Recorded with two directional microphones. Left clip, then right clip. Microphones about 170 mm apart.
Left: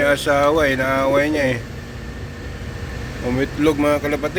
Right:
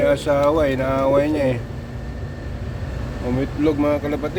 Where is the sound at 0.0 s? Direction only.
Centre (ahead or behind).